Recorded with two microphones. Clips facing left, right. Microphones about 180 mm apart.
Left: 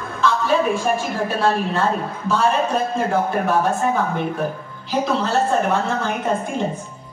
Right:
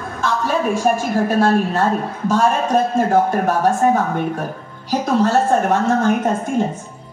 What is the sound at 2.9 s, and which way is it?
A woman's voice, 45° right (ahead or behind).